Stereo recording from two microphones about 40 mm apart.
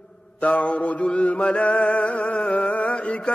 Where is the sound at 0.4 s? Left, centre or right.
Left.